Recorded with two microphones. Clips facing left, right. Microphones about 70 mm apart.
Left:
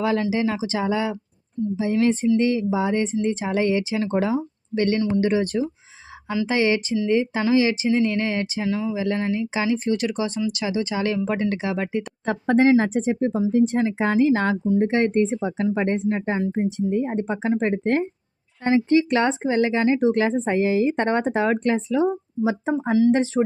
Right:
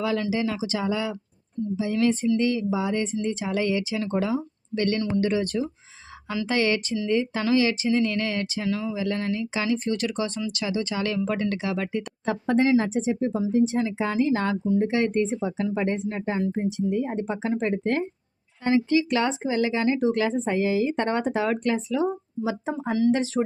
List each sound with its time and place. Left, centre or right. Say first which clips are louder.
0.0 s speech: left 3 dB; left
8.6 s speech: left 3 dB; centre
9.0 s speech: left 3 dB; left
12.2 s speech: left 4 dB; left
13.5 s speech: left 2 dB; left
14.0 s speech: left 5 dB; left
22.8 s speech: left 4 dB; centre
23.1 s speech: left 4 dB; left